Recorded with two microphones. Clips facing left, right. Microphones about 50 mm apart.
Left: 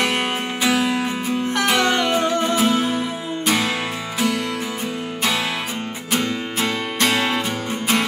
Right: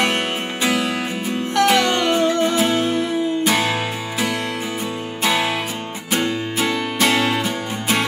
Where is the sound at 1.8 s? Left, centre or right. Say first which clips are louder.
Right 1 dB; centre.